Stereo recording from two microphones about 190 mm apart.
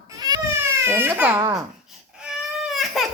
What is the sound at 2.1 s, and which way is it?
Baby cry, centre (ahead or behind).